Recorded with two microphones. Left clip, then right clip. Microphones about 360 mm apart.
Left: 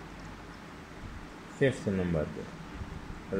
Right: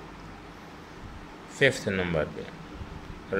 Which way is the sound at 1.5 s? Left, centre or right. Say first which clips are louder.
Right 5 dB; right.